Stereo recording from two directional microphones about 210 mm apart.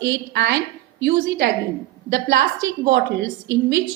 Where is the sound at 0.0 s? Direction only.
55° right (ahead or behind).